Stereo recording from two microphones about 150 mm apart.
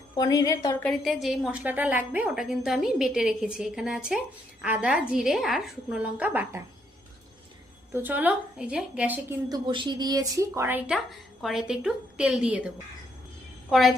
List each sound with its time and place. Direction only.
0.1 s a woman's voice: 25° left (ahead or behind)
0.8 s a woman's voice: 5° left (ahead or behind)
7.9 s a woman's voice: 10° right (ahead or behind)
9.5 s a woman's voice: 30° right (ahead or behind); by 13.9 s centre (ahead or behind)